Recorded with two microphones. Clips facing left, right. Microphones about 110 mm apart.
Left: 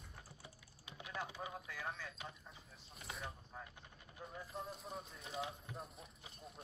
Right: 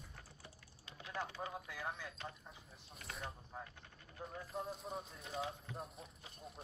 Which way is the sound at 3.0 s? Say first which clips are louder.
Even; centre (ahead or behind).